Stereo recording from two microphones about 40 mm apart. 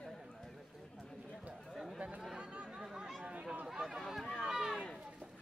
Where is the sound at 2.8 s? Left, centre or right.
Centre.